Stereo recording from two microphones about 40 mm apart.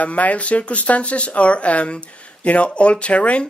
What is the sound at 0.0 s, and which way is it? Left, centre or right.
Speech, left.